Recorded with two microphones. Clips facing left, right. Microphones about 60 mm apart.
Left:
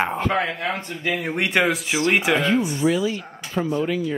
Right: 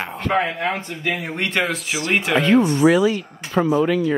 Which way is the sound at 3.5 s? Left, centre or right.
Right.